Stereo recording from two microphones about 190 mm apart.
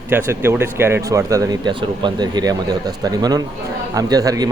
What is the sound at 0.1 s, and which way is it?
Speech, 15° right (ahead or behind).